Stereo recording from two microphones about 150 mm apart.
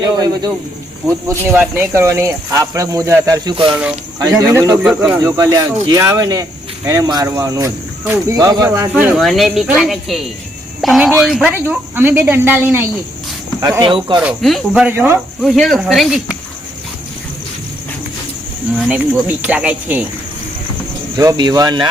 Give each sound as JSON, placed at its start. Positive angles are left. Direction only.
{"t": 0.0, "sound": "speech", "side_deg": -25}
{"t": 1.0, "sound": "speech", "side_deg": -15}
{"t": 3.7, "sound": "speech", "side_deg": -5}
{"t": 4.2, "sound": "speech", "side_deg": -20}
{"t": 9.1, "sound": "speech", "side_deg": 0}
{"t": 10.8, "sound": "a sound", "side_deg": 0}
{"t": 11.2, "sound": "speech", "side_deg": -5}
{"t": 13.8, "sound": "speech", "side_deg": -35}
{"t": 14.4, "sound": "speech", "side_deg": 0}
{"t": 14.8, "sound": "speech", "side_deg": -15}
{"t": 15.4, "sound": "speech", "side_deg": 0}
{"t": 18.9, "sound": "speech", "side_deg": -10}
{"t": 21.2, "sound": "speech", "side_deg": -25}